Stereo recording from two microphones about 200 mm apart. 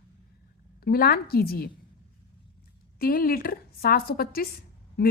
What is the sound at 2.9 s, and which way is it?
A woman's voice, 45° left (ahead or behind).